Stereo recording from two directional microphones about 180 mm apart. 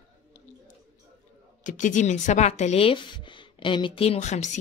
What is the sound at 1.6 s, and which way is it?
Speech, 45° left (ahead or behind).